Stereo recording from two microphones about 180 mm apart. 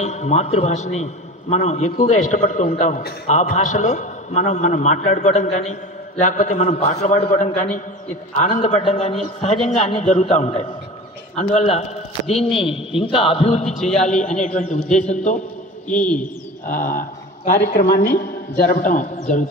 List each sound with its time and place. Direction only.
0.0 s a man's voice: 40° left (ahead or behind)
15.9 s a man's voice: 5° left (ahead or behind)
16.6 s a man's voice: 50° left (ahead or behind)